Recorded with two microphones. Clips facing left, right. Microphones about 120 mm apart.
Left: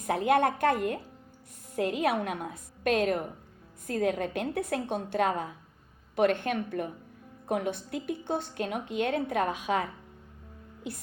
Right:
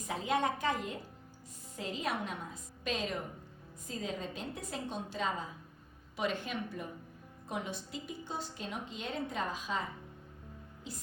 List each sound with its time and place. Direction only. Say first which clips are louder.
0.1 s a woman's voice: left 8 dB; 60° left (ahead or behind)